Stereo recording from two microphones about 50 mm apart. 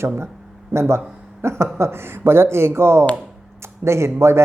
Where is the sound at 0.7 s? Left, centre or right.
Right.